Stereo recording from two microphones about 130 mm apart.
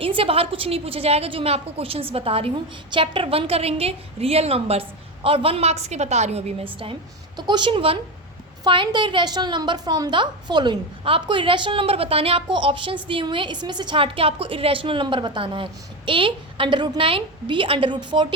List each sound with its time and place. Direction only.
0.0 s a woman's voice: 45° right (ahead or behind)
7.3 s a woman's voice: 35° right (ahead or behind)